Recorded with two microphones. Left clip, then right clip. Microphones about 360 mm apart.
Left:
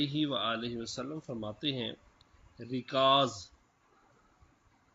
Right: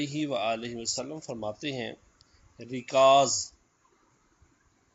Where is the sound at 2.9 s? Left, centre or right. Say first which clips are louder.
Right 6 dB; centre.